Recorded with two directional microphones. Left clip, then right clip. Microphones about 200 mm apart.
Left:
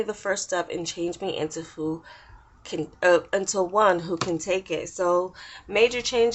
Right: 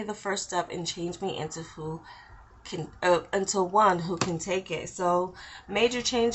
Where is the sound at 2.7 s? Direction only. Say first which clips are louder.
Left 5 dB; 30° left (ahead or behind).